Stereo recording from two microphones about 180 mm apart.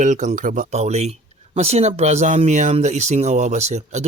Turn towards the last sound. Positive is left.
turn(degrees=-40)  # may be behind; listen again after turning